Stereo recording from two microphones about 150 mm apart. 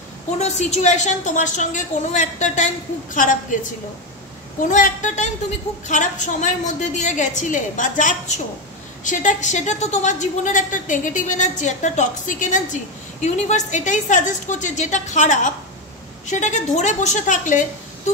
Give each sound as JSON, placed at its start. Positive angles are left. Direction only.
{"t": 0.4, "sound": "a woman's voice", "side_deg": 50}
{"t": 4.6, "sound": "a woman's voice", "side_deg": 60}